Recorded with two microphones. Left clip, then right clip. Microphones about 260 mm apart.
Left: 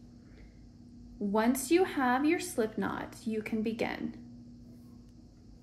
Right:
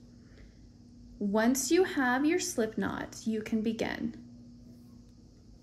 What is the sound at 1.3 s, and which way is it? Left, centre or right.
A woman's voice, right.